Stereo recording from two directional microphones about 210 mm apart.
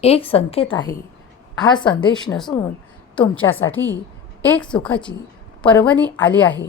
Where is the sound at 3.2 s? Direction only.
5° left (ahead or behind).